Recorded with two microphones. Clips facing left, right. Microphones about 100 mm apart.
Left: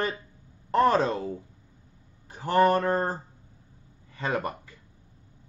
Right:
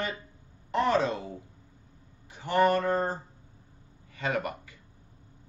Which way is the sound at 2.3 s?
45° left (ahead or behind).